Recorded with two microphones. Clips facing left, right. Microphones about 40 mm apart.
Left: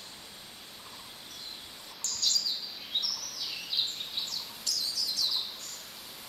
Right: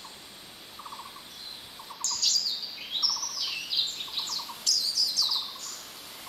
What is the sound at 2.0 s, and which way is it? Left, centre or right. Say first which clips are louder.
Bird: right 2 dB; right.